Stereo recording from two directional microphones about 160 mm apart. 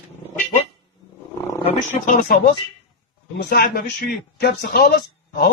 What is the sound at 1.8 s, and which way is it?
Speech, 55° left (ahead or behind).